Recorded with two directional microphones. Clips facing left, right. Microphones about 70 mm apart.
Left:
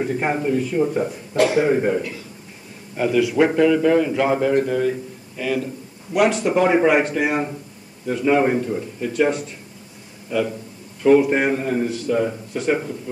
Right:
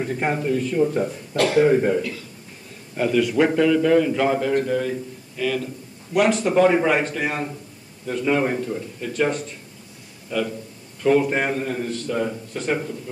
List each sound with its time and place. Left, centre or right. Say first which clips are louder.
0.0 s a man's voice: left 2 dB; centre
3.0 s a man's voice: left 2 dB; centre